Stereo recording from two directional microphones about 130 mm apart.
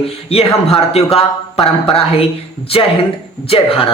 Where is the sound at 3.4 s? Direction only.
45° left (ahead or behind).